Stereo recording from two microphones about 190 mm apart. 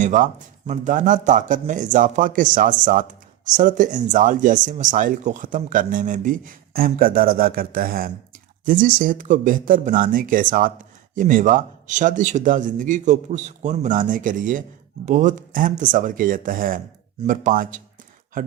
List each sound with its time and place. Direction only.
0.0 s speech: 40° right (ahead or behind)